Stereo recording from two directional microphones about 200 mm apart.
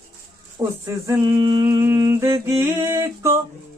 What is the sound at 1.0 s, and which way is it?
Mantra, 20° right (ahead or behind).